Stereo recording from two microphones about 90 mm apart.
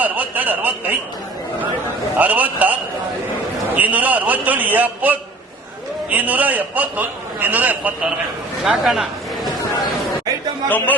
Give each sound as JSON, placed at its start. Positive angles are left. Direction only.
{"t": 0.0, "sound": "speech", "side_deg": -20}
{"t": 2.1, "sound": "a man's voice", "side_deg": -20}
{"t": 3.8, "sound": "a man's voice", "side_deg": -20}
{"t": 8.6, "sound": "a man's voice", "side_deg": -5}
{"t": 10.7, "sound": "speech", "side_deg": 20}